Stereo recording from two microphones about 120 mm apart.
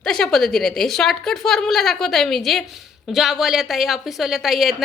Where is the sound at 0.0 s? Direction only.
5° left (ahead or behind).